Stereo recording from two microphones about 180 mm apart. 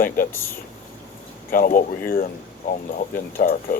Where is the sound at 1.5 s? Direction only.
50° left (ahead or behind).